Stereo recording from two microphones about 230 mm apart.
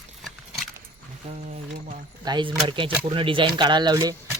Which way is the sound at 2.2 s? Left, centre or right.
Centre.